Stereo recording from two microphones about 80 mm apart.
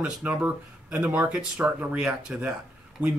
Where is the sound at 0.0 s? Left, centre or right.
Centre.